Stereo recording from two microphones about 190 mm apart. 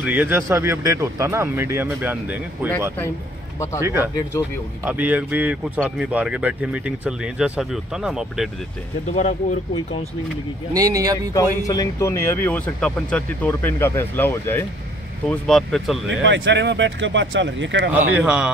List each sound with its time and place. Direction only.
0.0 s speech: 10° right (ahead or behind)
3.5 s speech: 15° left (ahead or behind)
3.8 s speech: 10° right (ahead or behind)
9.1 s speech: 40° left (ahead or behind)
10.7 s speech: 20° right (ahead or behind)
11.6 s speech: 20° left (ahead or behind)
16.1 s speech: 75° right (ahead or behind)
17.9 s speech: 10° right (ahead or behind)